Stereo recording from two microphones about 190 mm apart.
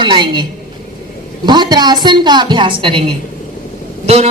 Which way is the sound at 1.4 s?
20° right (ahead or behind).